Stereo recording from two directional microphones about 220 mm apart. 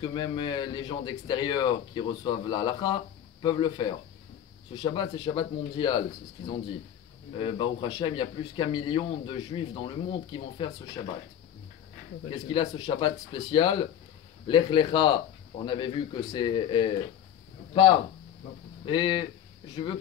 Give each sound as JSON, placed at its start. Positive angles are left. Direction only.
{"t": 0.0, "sound": "a man's voice", "side_deg": 20}
{"t": 12.4, "sound": "a man's voice", "side_deg": 20}